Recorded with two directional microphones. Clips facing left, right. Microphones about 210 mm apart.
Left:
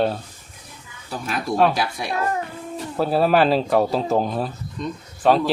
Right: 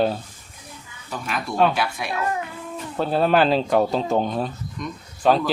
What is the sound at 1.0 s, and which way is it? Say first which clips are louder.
Speech: left 3 dB; 40° left (ahead or behind).